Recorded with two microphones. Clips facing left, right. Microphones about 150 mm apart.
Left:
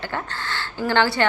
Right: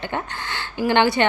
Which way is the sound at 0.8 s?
20° right (ahead or behind).